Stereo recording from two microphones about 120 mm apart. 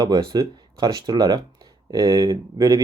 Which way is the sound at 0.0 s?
30° right (ahead or behind).